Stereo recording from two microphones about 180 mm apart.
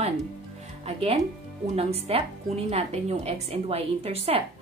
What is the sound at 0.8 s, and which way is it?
A woman's voice, 35° right (ahead or behind).